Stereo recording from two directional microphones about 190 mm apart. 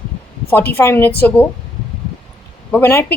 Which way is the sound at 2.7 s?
10° left (ahead or behind).